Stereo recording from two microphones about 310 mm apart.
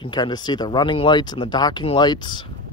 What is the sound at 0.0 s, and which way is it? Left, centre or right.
Speech, centre.